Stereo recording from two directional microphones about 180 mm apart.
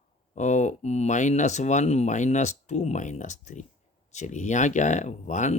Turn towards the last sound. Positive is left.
turn(degrees=40)  # may be behind; listen again after turning